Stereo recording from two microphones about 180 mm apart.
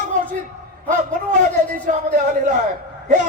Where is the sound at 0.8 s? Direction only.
45° right (ahead or behind).